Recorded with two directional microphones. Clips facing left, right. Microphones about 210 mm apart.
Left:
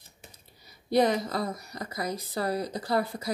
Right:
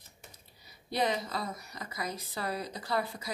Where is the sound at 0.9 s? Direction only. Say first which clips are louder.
Left 7 dB; 40° left (ahead or behind).